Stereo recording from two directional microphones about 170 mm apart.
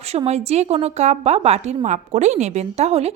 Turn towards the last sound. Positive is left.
turn(degrees=-40)  # may be behind; listen again after turning